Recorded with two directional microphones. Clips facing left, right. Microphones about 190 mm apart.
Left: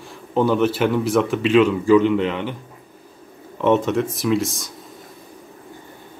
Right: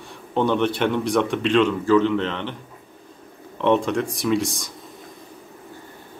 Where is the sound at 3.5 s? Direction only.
5° left (ahead or behind).